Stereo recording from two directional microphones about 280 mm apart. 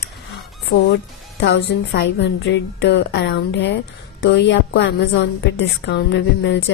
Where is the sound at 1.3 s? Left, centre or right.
Left.